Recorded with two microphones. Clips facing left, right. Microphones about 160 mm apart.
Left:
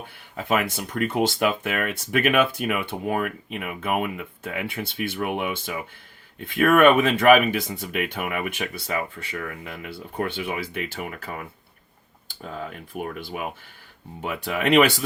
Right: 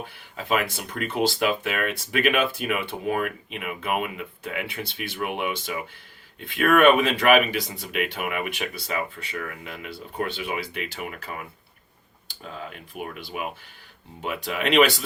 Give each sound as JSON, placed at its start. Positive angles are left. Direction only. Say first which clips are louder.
{"t": 0.3, "sound": "speech", "louder": "left 2 dB", "side_deg": 50}